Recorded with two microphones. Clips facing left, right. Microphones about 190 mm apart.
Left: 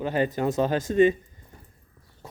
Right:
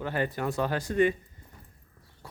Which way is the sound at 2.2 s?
20° left (ahead or behind).